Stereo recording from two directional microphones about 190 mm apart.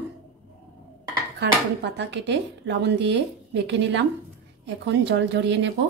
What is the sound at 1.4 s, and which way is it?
Speech, 65° right (ahead or behind).